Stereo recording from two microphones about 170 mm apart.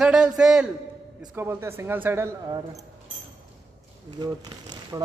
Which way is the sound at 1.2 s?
15° right (ahead or behind).